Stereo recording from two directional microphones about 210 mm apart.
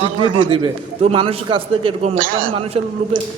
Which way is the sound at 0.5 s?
25° right (ahead or behind).